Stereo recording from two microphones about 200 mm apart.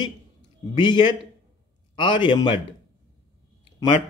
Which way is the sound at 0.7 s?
25° left (ahead or behind).